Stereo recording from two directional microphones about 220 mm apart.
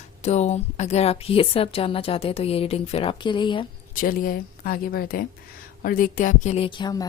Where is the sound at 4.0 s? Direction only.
40° left (ahead or behind).